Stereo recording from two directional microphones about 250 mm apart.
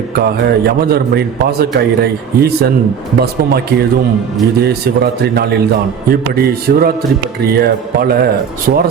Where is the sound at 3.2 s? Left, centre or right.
Right.